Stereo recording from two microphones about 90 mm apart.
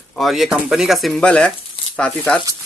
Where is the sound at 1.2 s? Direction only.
10° left (ahead or behind).